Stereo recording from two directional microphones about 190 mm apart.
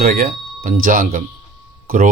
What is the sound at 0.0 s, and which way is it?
A man's voice, 50° right (ahead or behind).